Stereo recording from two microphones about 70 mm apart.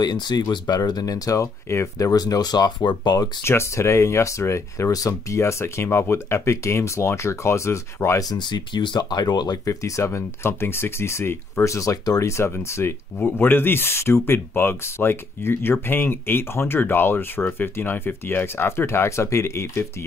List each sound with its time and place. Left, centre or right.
0.0 s speech: left
3.4 s speech: left
5.4 s speech: left
8.2 s speech: left
9.7 s speech: left
12.2 s speech: left